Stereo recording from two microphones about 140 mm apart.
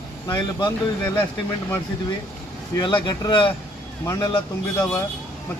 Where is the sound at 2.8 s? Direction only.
35° left (ahead or behind).